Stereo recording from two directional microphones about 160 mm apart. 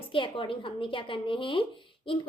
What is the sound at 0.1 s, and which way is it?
A woman's voice, 35° left (ahead or behind).